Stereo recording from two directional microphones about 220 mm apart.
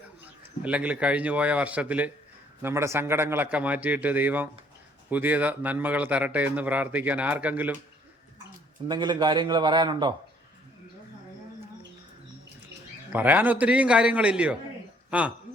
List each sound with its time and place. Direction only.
0.2 s a man's voice: 5° right (ahead or behind)
8.9 s a man's voice: 20° right (ahead or behind)
13.1 s a man's voice: 5° right (ahead or behind)